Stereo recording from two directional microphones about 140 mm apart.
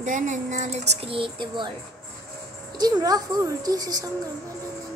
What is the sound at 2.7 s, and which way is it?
A woman's voice, 30° right (ahead or behind).